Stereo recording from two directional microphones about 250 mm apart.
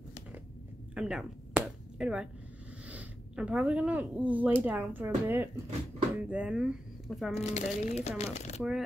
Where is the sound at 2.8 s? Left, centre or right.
Centre.